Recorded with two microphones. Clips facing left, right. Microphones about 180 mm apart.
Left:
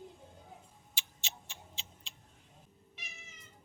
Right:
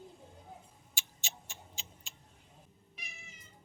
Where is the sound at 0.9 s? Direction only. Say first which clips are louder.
Even; 45° right (ahead or behind).